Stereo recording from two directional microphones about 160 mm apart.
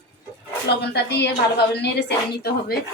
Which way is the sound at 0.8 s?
90° left.